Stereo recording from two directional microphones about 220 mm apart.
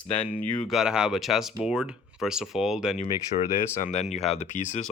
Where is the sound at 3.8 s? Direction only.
30° left (ahead or behind).